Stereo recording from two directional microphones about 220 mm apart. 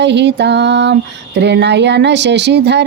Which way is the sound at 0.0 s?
50° right (ahead or behind).